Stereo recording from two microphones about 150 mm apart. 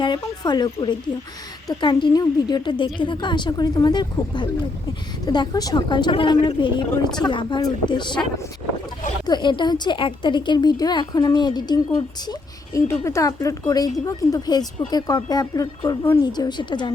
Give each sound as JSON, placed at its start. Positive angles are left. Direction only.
{"t": 0.0, "sound": "a woman's voice", "side_deg": 30}
{"t": 9.2, "sound": "a woman's voice", "side_deg": 30}
{"t": 16.2, "sound": "a woman's voice", "side_deg": 30}